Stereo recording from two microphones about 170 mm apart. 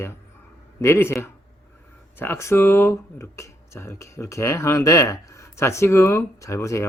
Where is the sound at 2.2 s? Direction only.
15° left (ahead or behind).